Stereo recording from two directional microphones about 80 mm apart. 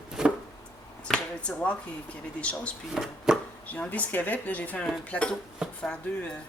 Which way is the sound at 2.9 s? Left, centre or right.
Centre.